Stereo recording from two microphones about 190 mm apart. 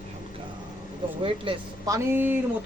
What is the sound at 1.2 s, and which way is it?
Speech, 30° right (ahead or behind).